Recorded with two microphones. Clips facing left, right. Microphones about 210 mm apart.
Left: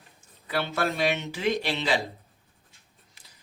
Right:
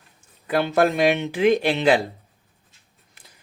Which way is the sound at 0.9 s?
55° right (ahead or behind).